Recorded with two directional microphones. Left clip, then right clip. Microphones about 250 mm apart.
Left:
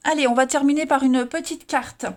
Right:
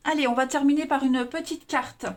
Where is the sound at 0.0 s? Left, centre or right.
Left.